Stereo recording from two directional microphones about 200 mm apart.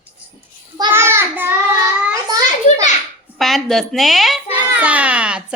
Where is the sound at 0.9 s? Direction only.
10° right (ahead or behind).